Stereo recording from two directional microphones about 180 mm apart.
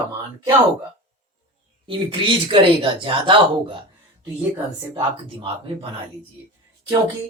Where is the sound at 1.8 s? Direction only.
30° right (ahead or behind).